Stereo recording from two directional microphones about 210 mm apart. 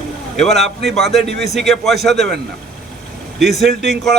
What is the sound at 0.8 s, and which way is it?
A man's voice, centre (ahead or behind).